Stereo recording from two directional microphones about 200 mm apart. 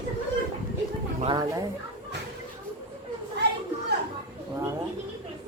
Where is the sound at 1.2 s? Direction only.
25° right (ahead or behind).